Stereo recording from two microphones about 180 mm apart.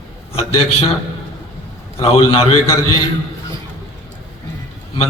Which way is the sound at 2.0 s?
30° left (ahead or behind).